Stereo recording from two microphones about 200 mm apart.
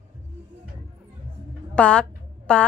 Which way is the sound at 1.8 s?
5° left (ahead or behind).